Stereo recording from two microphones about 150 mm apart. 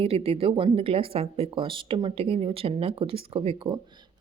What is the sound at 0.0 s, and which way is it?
A woman's voice, 40° right (ahead or behind).